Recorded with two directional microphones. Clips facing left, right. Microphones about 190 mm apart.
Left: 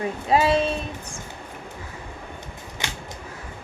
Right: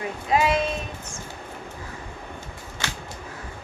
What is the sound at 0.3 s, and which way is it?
Speech, 35° left (ahead or behind).